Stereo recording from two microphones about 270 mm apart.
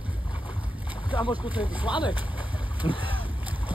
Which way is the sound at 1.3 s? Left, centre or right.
Centre.